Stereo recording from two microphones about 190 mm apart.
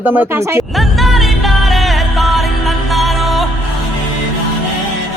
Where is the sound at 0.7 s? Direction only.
Centre (ahead or behind).